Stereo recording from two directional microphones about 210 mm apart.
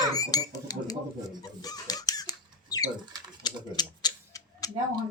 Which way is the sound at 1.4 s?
15° left (ahead or behind).